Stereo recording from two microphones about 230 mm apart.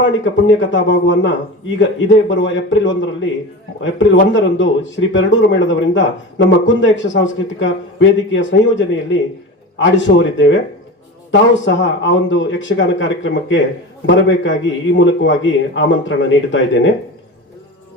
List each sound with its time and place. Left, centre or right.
0.0 s a man's voice: left